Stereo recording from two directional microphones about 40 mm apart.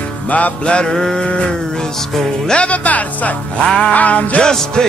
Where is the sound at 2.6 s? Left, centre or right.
Left.